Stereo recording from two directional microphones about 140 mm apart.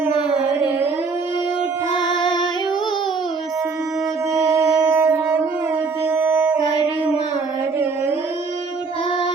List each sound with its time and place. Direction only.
2.0 s music: 30° left (ahead or behind)
4.8 s wind instrument: 20° right (ahead or behind)
6.1 s music: 15° right (ahead or behind)